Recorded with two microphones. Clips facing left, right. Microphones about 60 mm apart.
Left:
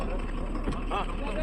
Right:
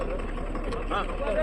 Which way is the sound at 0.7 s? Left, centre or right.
Right.